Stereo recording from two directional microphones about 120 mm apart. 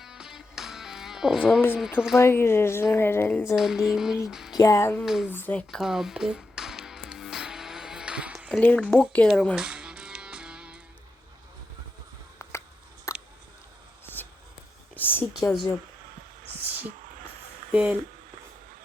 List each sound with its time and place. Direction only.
0.0 s music: 5° right (ahead or behind)
1.7 s speech: 5° right (ahead or behind)
2.1 s a woman's voice: 20° left (ahead or behind)
3.4 s speech: 5° right (ahead or behind)
4.3 s a sound: 5° right (ahead or behind)
4.5 s a woman's voice: 25° left (ahead or behind)
5.0 s speech: 5° right (ahead or behind)
5.3 s speech: 15° left (ahead or behind)
5.8 s music: 5° right (ahead or behind)
8.4 s speech: 10° left (ahead or behind)
9.6 s music: 5° right (ahead or behind)
12.4 s a sound: 25° left (ahead or behind)
15.4 s speech: centre (ahead or behind)
17.7 s speech: 10° right (ahead or behind)